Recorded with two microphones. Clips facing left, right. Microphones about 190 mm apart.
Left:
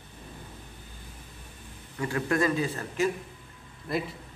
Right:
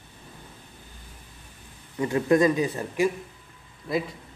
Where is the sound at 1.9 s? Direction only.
20° right (ahead or behind).